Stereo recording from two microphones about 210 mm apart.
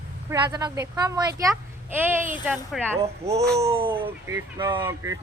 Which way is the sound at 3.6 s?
25° right (ahead or behind).